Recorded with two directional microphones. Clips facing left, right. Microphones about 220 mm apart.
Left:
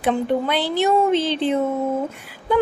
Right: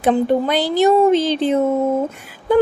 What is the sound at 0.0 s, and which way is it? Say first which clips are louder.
A woman's voice: right 4 dB; 40° right (ahead or behind).